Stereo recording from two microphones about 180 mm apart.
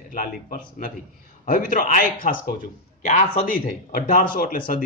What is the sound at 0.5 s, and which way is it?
Speech, 50° left (ahead or behind).